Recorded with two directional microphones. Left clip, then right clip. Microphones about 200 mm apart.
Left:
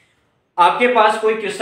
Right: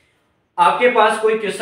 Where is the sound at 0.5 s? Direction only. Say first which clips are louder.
Even; 40° left (ahead or behind).